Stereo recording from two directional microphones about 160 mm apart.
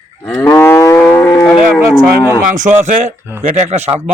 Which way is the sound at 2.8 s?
45° right (ahead or behind).